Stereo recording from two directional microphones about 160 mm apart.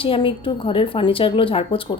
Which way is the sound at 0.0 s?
35° left (ahead or behind).